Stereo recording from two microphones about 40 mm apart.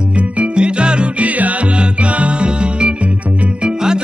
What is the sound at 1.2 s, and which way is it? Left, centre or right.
Music, right.